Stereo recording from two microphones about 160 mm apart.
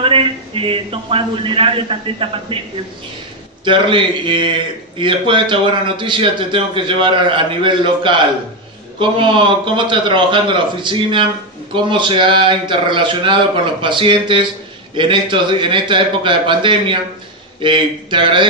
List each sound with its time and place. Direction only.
0.0 s a man's voice: 35° right (ahead or behind)
3.6 s a man's voice: 30° right (ahead or behind)
9.8 s a man's voice: 30° right (ahead or behind)